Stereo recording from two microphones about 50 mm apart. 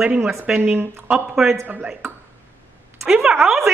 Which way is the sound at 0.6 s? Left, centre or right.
Right.